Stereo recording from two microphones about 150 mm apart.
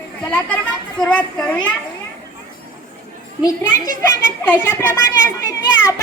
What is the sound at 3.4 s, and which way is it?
A child's voice, 20° left (ahead or behind).